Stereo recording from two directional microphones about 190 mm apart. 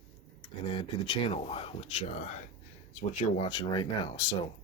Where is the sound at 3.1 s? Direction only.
35° left (ahead or behind).